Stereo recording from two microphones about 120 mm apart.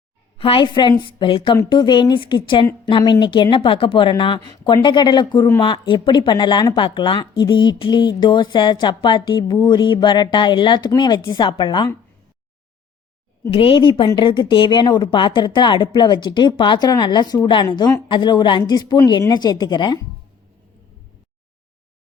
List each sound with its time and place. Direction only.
0.3 s a woman's voice: 50° left (ahead or behind)
13.5 s a woman's voice: 50° left (ahead or behind)